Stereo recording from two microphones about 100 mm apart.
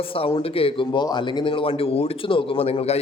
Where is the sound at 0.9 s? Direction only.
50° left (ahead or behind).